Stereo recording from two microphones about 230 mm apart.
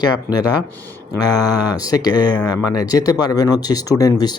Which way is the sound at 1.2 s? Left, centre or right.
Centre.